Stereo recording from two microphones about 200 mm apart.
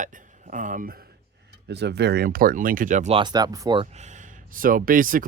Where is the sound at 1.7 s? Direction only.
55° right (ahead or behind).